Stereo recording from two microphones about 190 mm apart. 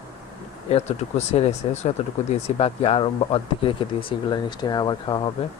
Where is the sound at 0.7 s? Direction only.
35° left (ahead or behind).